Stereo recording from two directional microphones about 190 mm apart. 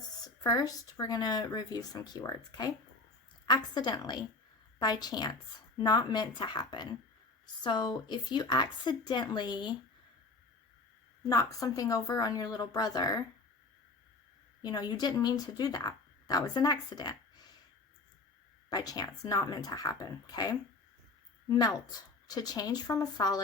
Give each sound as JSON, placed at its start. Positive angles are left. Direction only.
{"t": 0.4, "sound": "a woman's voice", "side_deg": 20}
{"t": 11.2, "sound": "a woman's voice", "side_deg": 20}
{"t": 14.6, "sound": "speech", "side_deg": 20}
{"t": 18.7, "sound": "a woman's voice", "side_deg": 20}